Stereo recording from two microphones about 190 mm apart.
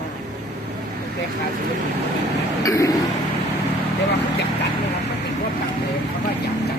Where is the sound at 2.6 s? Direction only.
20° left (ahead or behind).